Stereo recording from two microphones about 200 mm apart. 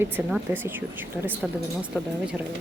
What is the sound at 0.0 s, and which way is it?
A woman's voice, 5° right (ahead or behind).